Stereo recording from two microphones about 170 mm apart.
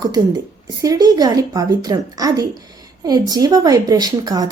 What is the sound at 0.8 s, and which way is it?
Speech, 20° right (ahead or behind).